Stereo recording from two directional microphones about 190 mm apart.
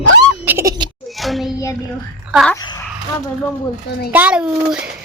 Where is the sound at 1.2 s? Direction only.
Centre (ahead or behind).